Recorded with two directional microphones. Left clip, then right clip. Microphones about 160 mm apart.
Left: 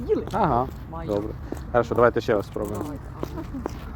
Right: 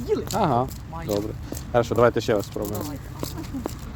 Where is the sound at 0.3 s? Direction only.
15° right (ahead or behind).